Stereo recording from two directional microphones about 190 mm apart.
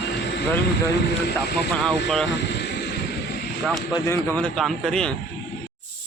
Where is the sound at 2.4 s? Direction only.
60° left (ahead or behind).